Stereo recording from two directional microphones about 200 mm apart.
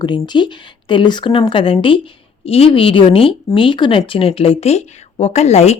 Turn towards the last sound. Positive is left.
turn(degrees=30)  # may be behind; listen again after turning